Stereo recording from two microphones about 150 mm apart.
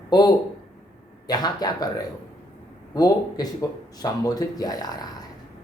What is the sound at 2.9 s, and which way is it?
Speech, 25° left (ahead or behind).